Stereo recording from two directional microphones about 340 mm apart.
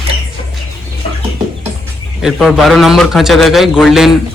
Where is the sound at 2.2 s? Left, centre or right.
Centre.